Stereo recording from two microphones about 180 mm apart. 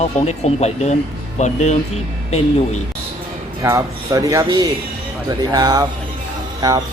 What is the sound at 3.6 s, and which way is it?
Speech, 15° right (ahead or behind).